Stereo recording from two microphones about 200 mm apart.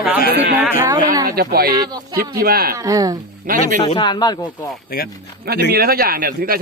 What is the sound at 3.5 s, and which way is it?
Speech, 40° right (ahead or behind).